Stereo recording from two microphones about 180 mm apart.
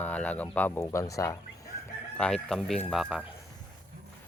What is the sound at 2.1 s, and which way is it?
Speech, 5° left (ahead or behind).